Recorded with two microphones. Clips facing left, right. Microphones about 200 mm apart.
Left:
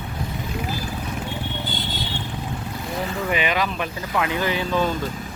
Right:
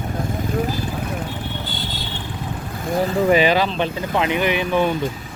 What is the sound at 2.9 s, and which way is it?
Speech, 40° right (ahead or behind).